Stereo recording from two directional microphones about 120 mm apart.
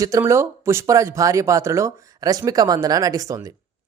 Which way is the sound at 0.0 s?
25° right (ahead or behind).